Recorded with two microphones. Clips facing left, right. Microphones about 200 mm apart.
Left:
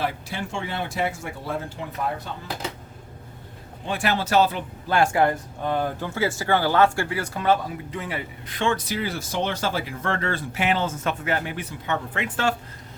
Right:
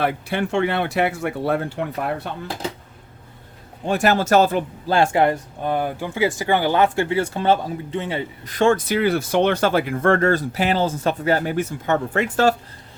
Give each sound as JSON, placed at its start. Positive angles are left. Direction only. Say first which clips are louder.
{"t": 0.0, "sound": "speech", "louder": "right 6 dB", "side_deg": -60}
{"t": 3.8, "sound": "speech", "louder": "right 7 dB", "side_deg": -45}
{"t": 4.9, "sound": "speech", "louder": "right 3 dB", "side_deg": -25}
{"t": 8.4, "sound": "speech", "louder": "right 8 dB", "side_deg": -45}